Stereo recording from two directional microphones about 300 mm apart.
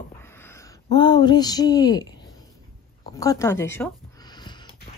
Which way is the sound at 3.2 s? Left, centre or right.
Centre.